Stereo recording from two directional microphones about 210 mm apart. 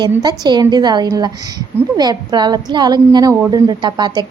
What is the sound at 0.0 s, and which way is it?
A woman's voice, 20° right (ahead or behind).